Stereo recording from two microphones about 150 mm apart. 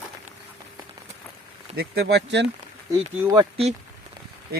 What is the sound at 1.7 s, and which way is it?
Speech, 90° right.